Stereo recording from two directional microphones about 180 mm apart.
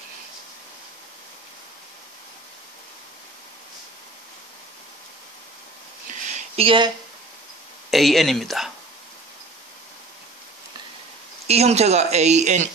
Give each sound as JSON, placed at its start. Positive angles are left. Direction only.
{"t": 6.2, "sound": "a sound", "side_deg": -40}
{"t": 7.9, "sound": "speech", "side_deg": 0}
{"t": 11.4, "sound": "speech", "side_deg": -35}